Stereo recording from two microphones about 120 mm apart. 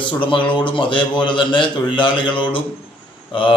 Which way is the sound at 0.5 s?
45° left (ahead or behind).